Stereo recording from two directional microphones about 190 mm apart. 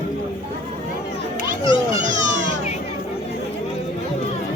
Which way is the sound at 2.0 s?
40° right (ahead or behind).